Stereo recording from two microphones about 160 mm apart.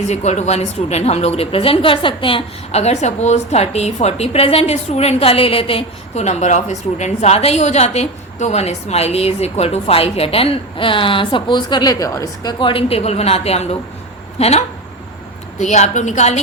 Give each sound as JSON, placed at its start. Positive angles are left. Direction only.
{"t": 0.1, "sound": "a woman's voice", "side_deg": 45}